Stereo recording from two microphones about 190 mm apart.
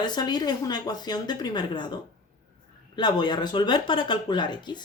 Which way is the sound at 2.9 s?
25° left (ahead or behind).